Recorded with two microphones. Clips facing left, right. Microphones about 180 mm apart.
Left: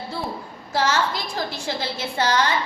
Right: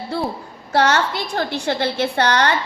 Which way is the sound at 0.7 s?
65° right (ahead or behind).